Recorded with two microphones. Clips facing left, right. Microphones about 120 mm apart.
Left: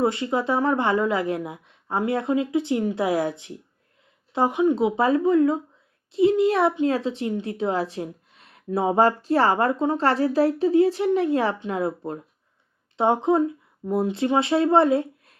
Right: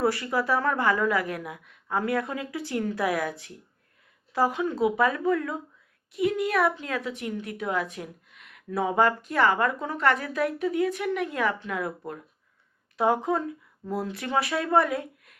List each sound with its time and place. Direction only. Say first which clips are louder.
0.0 s speech: left 3 dB; 20° left (ahead or behind)